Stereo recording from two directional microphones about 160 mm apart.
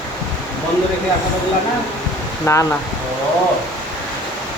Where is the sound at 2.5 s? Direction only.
20° left (ahead or behind).